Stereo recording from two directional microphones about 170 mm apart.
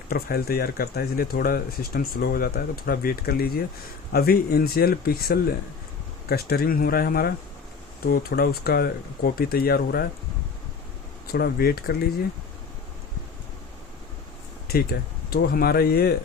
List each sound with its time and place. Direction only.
0.1 s speech: 65° left (ahead or behind)
11.3 s speech: 65° left (ahead or behind)
14.7 s speech: 65° left (ahead or behind)